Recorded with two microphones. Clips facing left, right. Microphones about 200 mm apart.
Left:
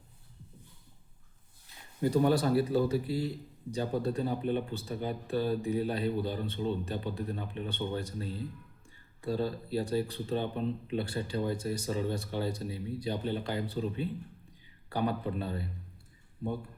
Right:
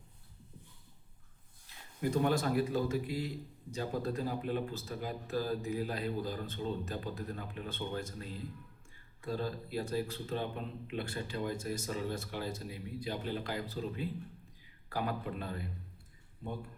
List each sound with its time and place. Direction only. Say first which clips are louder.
2.0 s speech: left 5 dB; 35° left (ahead or behind)